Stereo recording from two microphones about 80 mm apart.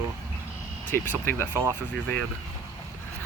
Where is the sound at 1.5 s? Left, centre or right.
Right.